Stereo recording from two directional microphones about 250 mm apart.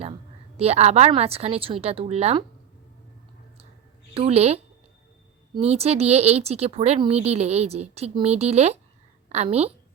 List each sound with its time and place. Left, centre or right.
0.6 s speech: right
4.1 s speech: right